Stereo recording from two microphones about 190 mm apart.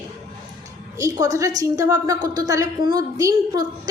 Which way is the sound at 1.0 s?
15° right (ahead or behind).